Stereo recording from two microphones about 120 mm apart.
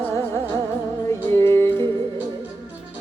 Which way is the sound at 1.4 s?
20° left (ahead or behind).